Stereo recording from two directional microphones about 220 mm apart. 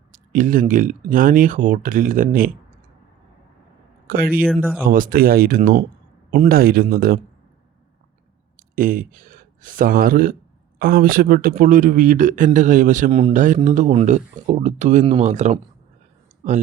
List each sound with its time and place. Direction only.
0.1 s a man's voice: 35° right (ahead or behind)
4.0 s a man's voice: 40° right (ahead or behind)
8.5 s a man's voice: 40° right (ahead or behind)